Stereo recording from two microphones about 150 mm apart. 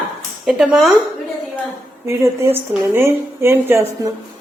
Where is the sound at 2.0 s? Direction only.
15° right (ahead or behind).